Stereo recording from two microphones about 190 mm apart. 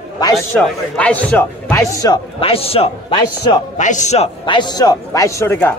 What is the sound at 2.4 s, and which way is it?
A man's voice, 30° left (ahead or behind).